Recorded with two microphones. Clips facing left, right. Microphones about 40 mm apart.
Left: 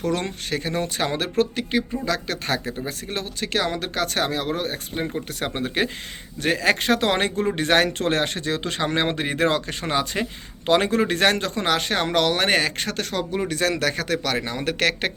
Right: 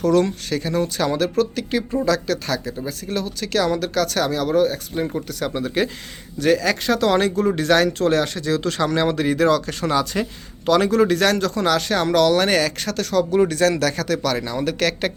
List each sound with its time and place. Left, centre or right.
0.0 s speech: left
13.5 s speech: centre